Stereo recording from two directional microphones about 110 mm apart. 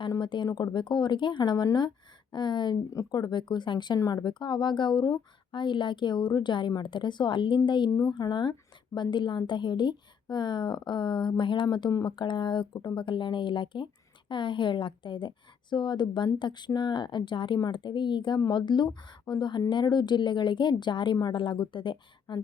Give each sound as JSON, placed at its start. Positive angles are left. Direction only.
{"t": 0.2, "sound": "speech", "side_deg": 45}
{"t": 2.9, "sound": "speech", "side_deg": 35}